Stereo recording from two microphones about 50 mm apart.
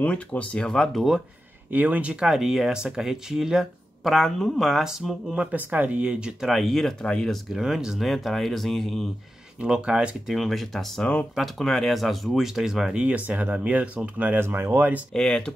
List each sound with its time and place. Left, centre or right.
0.0 s speech: left
0.7 s speech: centre
1.7 s speech: right
2.1 s speech: centre
5.3 s speech: centre
6.4 s speech: centre
7.4 s speech: centre
9.6 s speech: centre
10.2 s speech: centre
12.9 s speech: right
14.4 s speech: right
15.1 s speech: centre